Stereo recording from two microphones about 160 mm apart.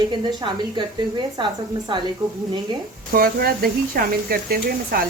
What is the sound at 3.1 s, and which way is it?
Speech, 65° right (ahead or behind).